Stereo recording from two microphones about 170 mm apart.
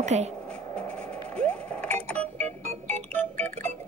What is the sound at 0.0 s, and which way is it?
Speech, 40° right (ahead or behind).